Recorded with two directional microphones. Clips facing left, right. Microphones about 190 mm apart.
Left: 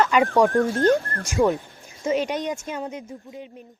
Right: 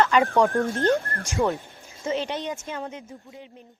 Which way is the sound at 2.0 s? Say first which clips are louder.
Left 4 dB; 15° left (ahead or behind).